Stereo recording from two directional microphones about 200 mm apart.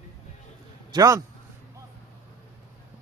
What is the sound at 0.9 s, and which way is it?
Speech, 15° right (ahead or behind).